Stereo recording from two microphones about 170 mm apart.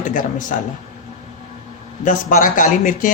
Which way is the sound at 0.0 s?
50° left (ahead or behind).